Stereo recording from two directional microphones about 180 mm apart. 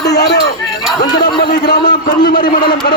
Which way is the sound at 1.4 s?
65° left (ahead or behind).